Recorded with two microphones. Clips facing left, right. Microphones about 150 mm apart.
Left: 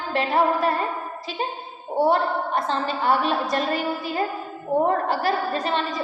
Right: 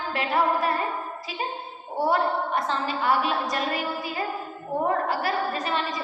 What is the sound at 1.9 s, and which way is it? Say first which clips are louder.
A woman's voice: left 3 dB; 25° left (ahead or behind).